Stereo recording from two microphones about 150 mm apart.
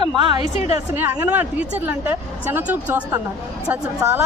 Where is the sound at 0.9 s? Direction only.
10° right (ahead or behind).